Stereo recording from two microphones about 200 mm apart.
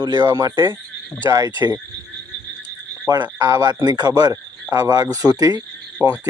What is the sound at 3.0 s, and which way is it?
A man's voice, 15° right (ahead or behind).